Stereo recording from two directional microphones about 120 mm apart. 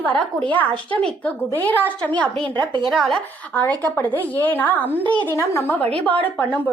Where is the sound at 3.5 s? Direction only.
15° left (ahead or behind).